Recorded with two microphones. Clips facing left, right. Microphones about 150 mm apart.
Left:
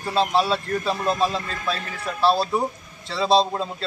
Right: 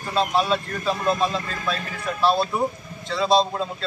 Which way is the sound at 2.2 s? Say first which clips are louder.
Left 1 dB; 30° left (ahead or behind).